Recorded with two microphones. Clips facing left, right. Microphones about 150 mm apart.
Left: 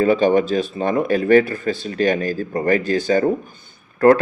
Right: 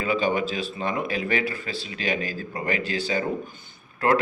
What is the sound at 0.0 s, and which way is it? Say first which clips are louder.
Speech: left 9 dB; 45° left (ahead or behind).